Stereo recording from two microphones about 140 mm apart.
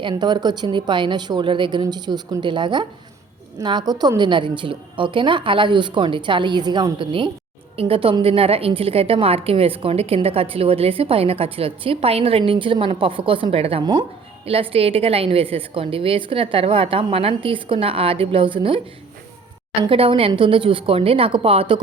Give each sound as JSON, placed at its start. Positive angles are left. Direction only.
{"t": 0.0, "sound": "a woman's voice", "side_deg": -30}
{"t": 19.9, "sound": "a woman's voice", "side_deg": -40}